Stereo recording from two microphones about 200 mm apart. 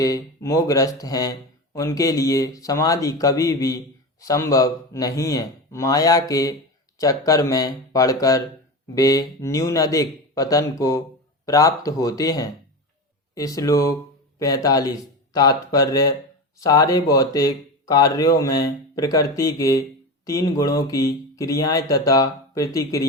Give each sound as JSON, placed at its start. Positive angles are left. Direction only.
{"t": 0.0, "sound": "speech", "side_deg": 15}